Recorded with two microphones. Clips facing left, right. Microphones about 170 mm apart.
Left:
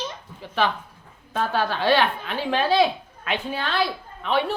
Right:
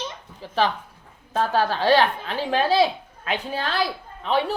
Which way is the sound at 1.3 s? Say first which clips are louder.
Right 2 dB; 40° right (ahead or behind).